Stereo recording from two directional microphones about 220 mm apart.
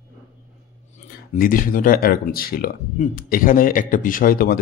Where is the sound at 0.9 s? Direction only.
35° left (ahead or behind).